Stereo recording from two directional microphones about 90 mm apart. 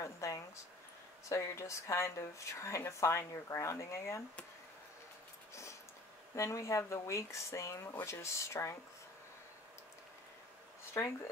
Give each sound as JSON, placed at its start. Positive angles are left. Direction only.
{"t": 0.0, "sound": "speech", "side_deg": 40}
{"t": 5.5, "sound": "a sound", "side_deg": 30}
{"t": 6.3, "sound": "speech", "side_deg": 35}